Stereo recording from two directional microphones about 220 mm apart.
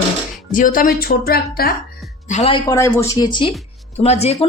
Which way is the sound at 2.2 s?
30° left (ahead or behind).